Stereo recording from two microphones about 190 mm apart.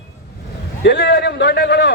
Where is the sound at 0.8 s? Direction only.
65° left (ahead or behind).